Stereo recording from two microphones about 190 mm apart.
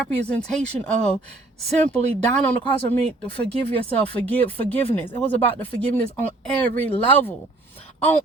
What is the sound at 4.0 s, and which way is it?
Speech, 5° left (ahead or behind).